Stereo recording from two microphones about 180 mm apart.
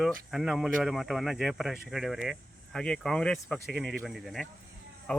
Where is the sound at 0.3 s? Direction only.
Centre (ahead or behind).